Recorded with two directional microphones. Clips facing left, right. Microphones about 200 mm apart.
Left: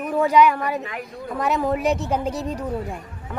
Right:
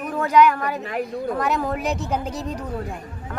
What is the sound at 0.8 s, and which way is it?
Speech, 40° right (ahead or behind).